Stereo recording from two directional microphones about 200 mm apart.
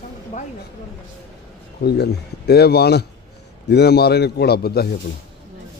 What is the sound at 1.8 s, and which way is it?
Speech, 55° left (ahead or behind).